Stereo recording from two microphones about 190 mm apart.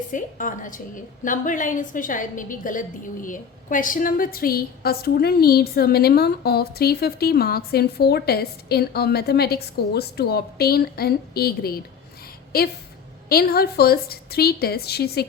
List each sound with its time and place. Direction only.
0.1 s a woman's voice: 45° left (ahead or behind)